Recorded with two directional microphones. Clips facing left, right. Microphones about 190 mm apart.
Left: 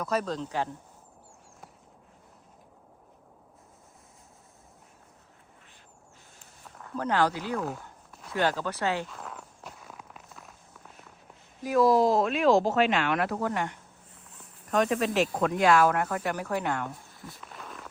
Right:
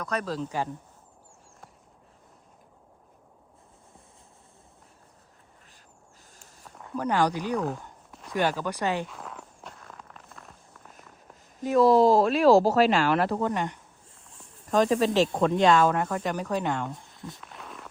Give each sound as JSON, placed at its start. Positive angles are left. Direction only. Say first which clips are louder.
{"t": 0.0, "sound": "speech", "louder": "left 1 dB", "side_deg": 5}
{"t": 6.8, "sound": "speech", "louder": "right 1 dB", "side_deg": -15}
{"t": 7.6, "sound": "a sound", "louder": "right 3 dB", "side_deg": 0}
{"t": 8.3, "sound": "speech", "louder": "right 1 dB", "side_deg": -15}
{"t": 9.0, "sound": "walk", "louder": "right 1 dB", "side_deg": 0}
{"t": 11.6, "sound": "speech", "louder": "right 3 dB", "side_deg": -30}
{"t": 13.5, "sound": "speech", "louder": "right 2 dB", "side_deg": -15}
{"t": 14.3, "sound": "snake", "louder": "right 3 dB", "side_deg": -30}
{"t": 15.4, "sound": "speech", "louder": "right 1 dB", "side_deg": -25}
{"t": 17.4, "sound": "a sound", "louder": "even", "side_deg": 0}